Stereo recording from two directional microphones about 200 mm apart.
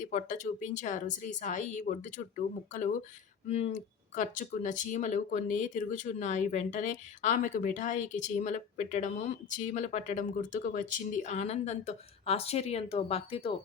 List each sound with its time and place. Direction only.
0.0 s speech: 40° left (ahead or behind)